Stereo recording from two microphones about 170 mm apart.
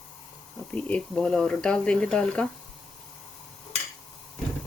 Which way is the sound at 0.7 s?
5° left (ahead or behind).